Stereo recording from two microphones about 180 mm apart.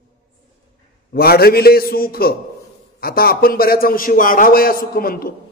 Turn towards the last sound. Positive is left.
turn(degrees=55)  # may be behind; listen again after turning